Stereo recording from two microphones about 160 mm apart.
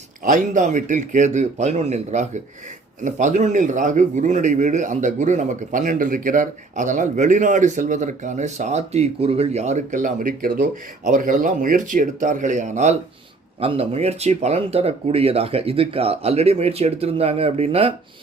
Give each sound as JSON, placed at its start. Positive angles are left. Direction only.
{"t": 0.3, "sound": "a man's voice", "side_deg": -55}